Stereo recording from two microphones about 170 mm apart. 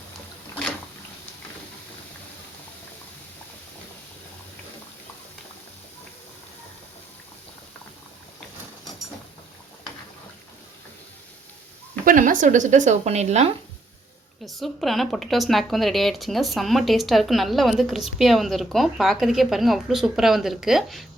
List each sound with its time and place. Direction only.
12.0 s speech: 50° right (ahead or behind)
14.4 s speech: centre (ahead or behind)